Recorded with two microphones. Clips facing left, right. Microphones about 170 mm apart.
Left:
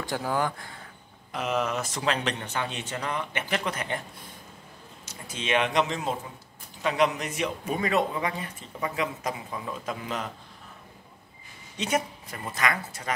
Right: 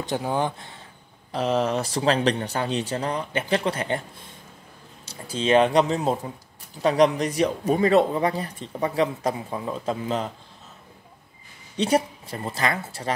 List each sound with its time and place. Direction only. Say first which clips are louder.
0.0 s a man's voice: right 3 dB; 20° right (ahead or behind)
11.7 s a man's voice: right 6 dB; 35° right (ahead or behind)